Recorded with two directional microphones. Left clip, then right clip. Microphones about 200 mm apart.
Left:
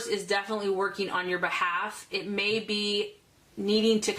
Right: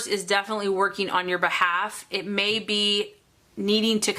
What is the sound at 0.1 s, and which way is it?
A woman's voice, 30° right (ahead or behind).